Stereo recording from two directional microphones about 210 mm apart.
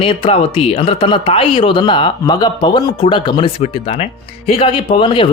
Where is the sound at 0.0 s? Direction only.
25° left (ahead or behind).